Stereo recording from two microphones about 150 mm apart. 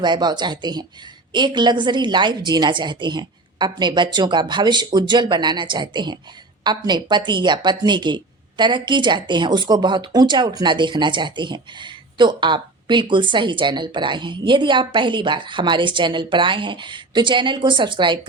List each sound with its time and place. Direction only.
0.0 s speech: 30° right (ahead or behind)